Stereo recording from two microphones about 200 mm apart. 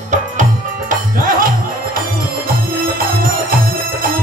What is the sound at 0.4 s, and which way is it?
Music, 45° right (ahead or behind).